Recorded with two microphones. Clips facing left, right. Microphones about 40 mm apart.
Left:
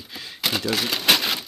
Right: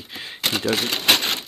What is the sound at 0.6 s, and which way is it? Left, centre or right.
Typewriter, centre.